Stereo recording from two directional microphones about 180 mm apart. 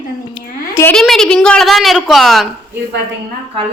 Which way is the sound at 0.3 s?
15° left (ahead or behind).